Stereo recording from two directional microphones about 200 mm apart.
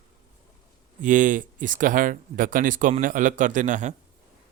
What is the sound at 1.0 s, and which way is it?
Speech, 40° right (ahead or behind).